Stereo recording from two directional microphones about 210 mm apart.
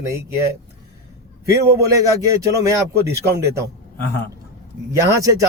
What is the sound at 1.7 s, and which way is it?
Speech, 15° right (ahead or behind).